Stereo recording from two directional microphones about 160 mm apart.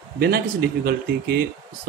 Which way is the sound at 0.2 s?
70° right (ahead or behind).